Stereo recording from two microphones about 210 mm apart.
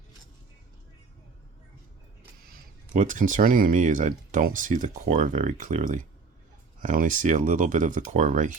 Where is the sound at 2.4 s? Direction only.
45° right (ahead or behind).